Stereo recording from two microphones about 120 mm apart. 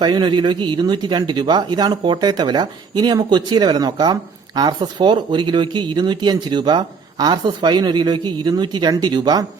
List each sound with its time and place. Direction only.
0.0 s speech: 40° right (ahead or behind)